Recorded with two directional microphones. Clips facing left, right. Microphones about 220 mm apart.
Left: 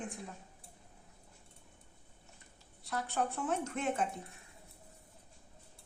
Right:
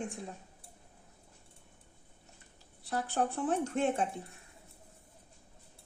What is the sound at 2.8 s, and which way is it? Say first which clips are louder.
A woman's voice: right 3 dB; 35° right (ahead or behind).